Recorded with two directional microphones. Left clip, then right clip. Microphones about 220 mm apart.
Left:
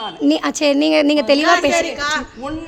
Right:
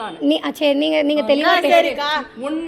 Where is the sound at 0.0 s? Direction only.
25° left (ahead or behind).